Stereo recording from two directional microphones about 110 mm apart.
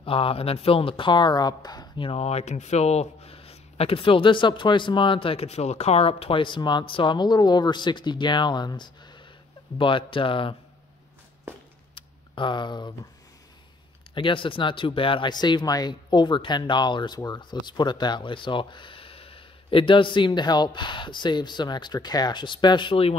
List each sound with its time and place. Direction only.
0.0 s speech: 55° left (ahead or behind); by 2.0 s 40° left (ahead or behind)
2.0 s speech: 70° left (ahead or behind); by 10.5 s 50° left (ahead or behind)
11.9 s a sound: 45° left (ahead or behind)
14.1 s speech: 50° left (ahead or behind)